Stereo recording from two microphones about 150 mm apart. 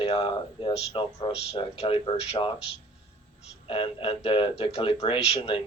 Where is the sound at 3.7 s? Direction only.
35° left (ahead or behind).